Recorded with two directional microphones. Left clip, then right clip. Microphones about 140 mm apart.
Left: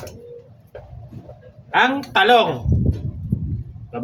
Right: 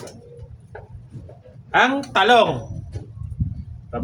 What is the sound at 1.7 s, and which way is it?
Speech, 15° right (ahead or behind).